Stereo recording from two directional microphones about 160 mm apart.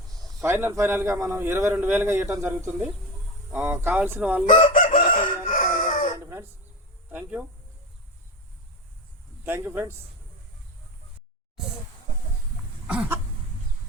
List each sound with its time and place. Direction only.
0.4 s speech: 15° right (ahead or behind)
4.6 s chicken: 55° left (ahead or behind)
7.1 s speech: 10° right (ahead or behind)
9.4 s speech: 15° right (ahead or behind)
12.9 s speech: 5° right (ahead or behind)